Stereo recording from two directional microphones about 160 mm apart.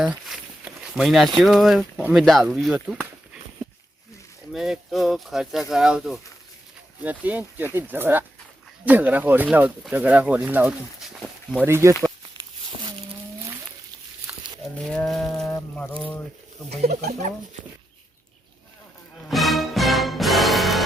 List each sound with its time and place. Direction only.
0.0 s walk: 5° right (ahead or behind)
1.4 s speech: centre (ahead or behind)
4.5 s speech: centre (ahead or behind)
14.3 s cattle: 10° right (ahead or behind)
14.8 s a sound: 5° left (ahead or behind)
19.3 s music: centre (ahead or behind)